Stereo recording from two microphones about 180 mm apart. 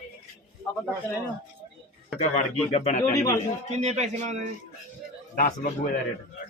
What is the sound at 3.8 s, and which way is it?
Speech, 40° right (ahead or behind).